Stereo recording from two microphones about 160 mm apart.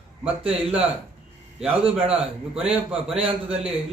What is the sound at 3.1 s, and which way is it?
Speech, 40° right (ahead or behind).